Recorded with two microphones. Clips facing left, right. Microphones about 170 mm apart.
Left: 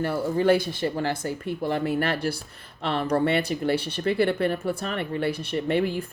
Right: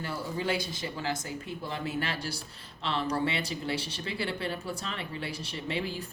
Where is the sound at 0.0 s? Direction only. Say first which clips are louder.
Left 10 dB; 55° left (ahead or behind).